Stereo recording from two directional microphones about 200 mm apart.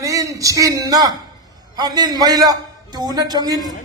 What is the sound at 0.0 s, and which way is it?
A man's voice, 15° right (ahead or behind).